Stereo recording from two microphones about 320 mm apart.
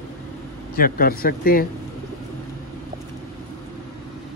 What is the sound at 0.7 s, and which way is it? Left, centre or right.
Speech, left.